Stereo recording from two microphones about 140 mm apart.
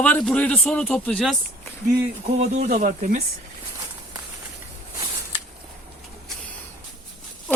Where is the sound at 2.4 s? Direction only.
60° right (ahead or behind).